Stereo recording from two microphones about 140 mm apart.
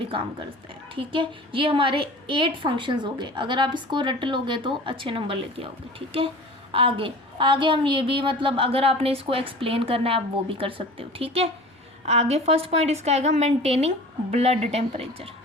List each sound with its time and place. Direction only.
0.1 s a woman's voice: 40° right (ahead or behind)